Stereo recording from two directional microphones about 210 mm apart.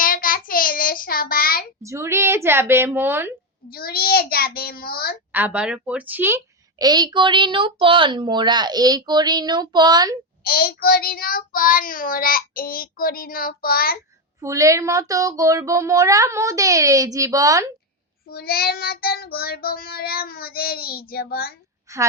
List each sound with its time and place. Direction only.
0.0 s child singing: 40° left (ahead or behind)
1.8 s speech: 15° right (ahead or behind)
3.7 s child singing: 45° left (ahead or behind)
5.3 s a woman's voice: 5° right (ahead or behind)
10.4 s child singing: 45° left (ahead or behind)
14.4 s speech: 15° right (ahead or behind)
18.3 s child singing: 45° left (ahead or behind)
21.9 s a woman's voice: 15° right (ahead or behind)